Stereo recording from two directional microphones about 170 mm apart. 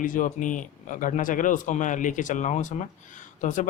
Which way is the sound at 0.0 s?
50° left (ahead or behind).